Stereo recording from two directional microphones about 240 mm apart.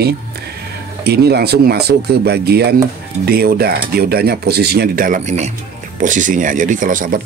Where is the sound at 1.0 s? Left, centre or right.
Right.